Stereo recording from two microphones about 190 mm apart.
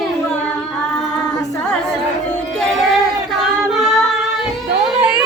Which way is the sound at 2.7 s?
Centre (ahead or behind).